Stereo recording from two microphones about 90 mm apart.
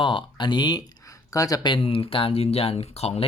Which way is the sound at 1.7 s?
85° left.